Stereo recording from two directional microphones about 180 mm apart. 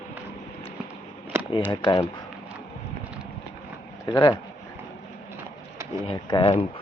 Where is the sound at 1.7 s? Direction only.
25° left (ahead or behind).